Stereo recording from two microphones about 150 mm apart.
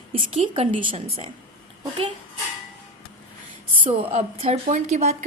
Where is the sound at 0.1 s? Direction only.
40° right (ahead or behind).